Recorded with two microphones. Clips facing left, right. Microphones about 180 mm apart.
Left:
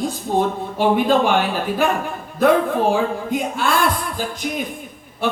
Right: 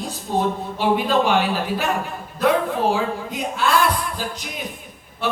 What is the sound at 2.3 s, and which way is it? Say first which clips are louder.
Speech: left 4 dB; 50° left (ahead or behind).